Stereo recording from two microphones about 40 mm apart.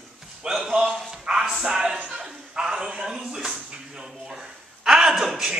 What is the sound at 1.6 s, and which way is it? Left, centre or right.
Speech, centre.